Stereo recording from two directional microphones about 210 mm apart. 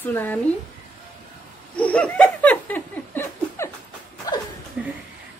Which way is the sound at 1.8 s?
5° left (ahead or behind).